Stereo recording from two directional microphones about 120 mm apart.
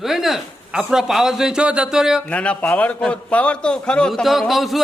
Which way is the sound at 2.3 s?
10° left (ahead or behind).